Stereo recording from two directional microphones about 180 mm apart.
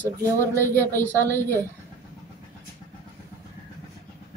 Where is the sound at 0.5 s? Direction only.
10° left (ahead or behind).